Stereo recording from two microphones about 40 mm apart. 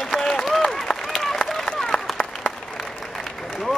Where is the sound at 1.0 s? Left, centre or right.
Centre.